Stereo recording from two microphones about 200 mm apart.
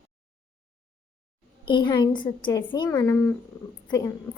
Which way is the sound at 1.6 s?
25° left (ahead or behind).